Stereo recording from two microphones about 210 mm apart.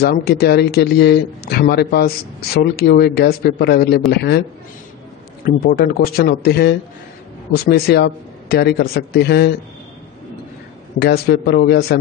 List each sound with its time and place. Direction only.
0.0 s a man's voice: 50° left (ahead or behind)
11.0 s a man's voice: 50° left (ahead or behind)